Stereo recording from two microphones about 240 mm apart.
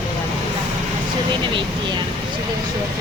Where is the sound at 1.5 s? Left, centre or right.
Centre.